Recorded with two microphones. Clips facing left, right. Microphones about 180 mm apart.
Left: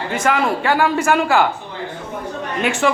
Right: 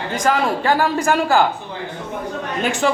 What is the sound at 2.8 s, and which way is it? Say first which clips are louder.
Speech: left 1 dB; 35° right (ahead or behind).